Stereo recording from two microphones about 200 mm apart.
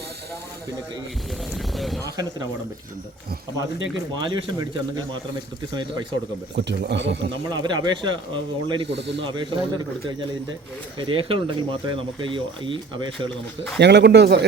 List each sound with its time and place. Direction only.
1.5 s a sound: centre (ahead or behind)
4.1 s speech: 25° right (ahead or behind)
6.6 s speech: 60° right (ahead or behind)
7.5 s speech: 20° right (ahead or behind)
8.9 s speech: 60° right (ahead or behind)
9.2 s speech: 25° right (ahead or behind)
11.0 s speech: 25° right (ahead or behind)
13.7 s speech: 60° right (ahead or behind)